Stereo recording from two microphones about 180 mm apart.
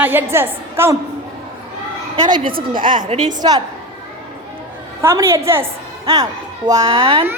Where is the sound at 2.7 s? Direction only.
30° right (ahead or behind).